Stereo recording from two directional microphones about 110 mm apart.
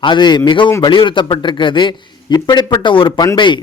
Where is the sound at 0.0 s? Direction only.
45° left (ahead or behind).